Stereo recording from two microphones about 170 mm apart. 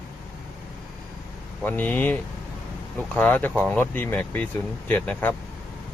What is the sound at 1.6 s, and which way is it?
Speech, 10° left (ahead or behind).